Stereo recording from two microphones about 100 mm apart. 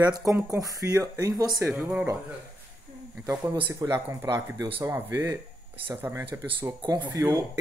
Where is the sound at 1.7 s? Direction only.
15° right (ahead or behind).